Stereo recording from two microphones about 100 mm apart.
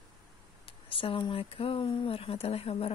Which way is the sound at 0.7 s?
65° left (ahead or behind).